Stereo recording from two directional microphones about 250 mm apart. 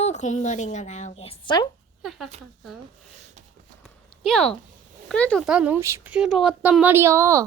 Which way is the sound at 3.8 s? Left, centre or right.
Centre.